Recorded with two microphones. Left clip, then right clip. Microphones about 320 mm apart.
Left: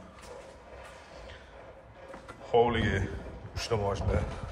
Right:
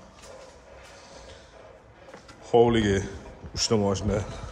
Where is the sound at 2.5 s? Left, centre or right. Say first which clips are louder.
Right 5 dB; right.